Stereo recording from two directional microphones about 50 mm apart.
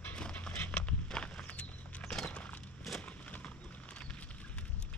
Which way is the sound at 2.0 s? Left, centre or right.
Centre.